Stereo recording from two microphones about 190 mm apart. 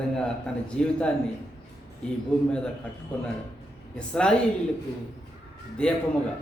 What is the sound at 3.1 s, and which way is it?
A man's voice, 5° left (ahead or behind).